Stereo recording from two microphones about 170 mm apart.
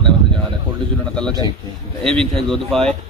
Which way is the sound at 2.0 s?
5° left (ahead or behind).